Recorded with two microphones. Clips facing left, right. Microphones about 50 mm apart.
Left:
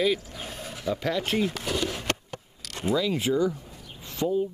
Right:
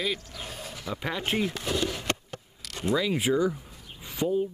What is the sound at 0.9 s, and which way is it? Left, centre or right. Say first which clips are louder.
Speech: left 2 dB; centre.